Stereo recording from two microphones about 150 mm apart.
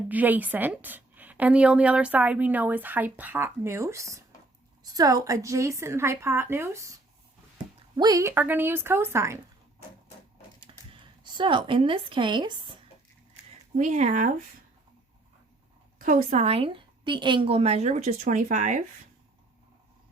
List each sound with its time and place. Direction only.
0.1 s a woman's voice: 10° right (ahead or behind)
7.9 s a woman's voice: 25° right (ahead or behind)
10.9 s speech: 30° right (ahead or behind)
13.7 s speech: 55° right (ahead or behind)
16.0 s a woman's voice: 55° right (ahead or behind)